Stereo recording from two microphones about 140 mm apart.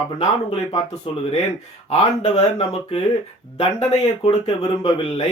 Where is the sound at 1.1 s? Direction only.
40° left (ahead or behind).